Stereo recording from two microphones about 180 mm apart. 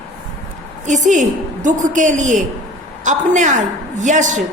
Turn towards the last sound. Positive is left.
turn(degrees=-45)  # may be behind; listen again after turning